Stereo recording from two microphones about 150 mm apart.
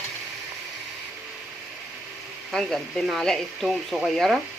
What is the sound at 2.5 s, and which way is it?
Speech, centre (ahead or behind).